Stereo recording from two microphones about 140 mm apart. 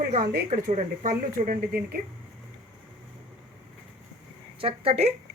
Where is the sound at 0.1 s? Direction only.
75° right (ahead or behind).